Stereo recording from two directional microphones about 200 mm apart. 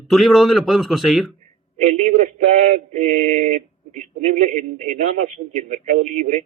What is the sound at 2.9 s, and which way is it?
Male singing, 35° right (ahead or behind).